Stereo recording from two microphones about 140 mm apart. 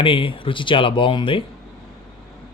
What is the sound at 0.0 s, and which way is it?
Speech, 40° left (ahead or behind).